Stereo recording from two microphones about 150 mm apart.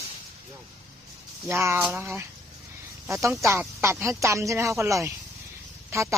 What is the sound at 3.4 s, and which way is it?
Speech, 20° right (ahead or behind).